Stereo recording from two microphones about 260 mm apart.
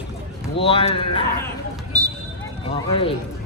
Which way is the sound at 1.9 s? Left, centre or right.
Centre.